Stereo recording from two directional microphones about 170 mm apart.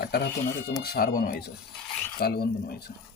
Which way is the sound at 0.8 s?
65° left (ahead or behind).